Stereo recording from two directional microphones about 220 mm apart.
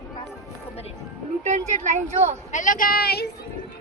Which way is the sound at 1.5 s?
35° right (ahead or behind).